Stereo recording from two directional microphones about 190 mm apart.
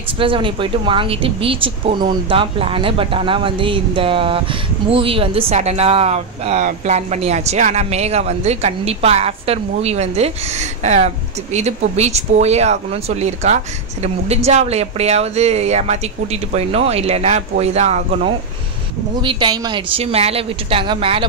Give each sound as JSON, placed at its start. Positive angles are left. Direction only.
{"t": 0.2, "sound": "speech", "side_deg": -25}
{"t": 19.2, "sound": "speech", "side_deg": -20}